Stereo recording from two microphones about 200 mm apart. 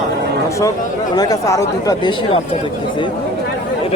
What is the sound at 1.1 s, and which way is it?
Speech, 20° left (ahead or behind).